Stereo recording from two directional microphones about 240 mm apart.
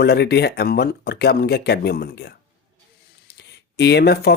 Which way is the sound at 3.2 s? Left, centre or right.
Left.